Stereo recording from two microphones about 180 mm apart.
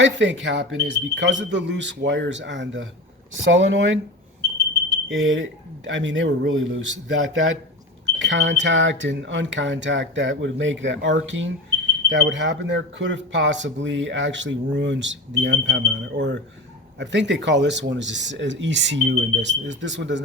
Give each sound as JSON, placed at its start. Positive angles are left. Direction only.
{"t": 0.0, "sound": "speech", "side_deg": -90}
{"t": 5.0, "sound": "speech", "side_deg": -90}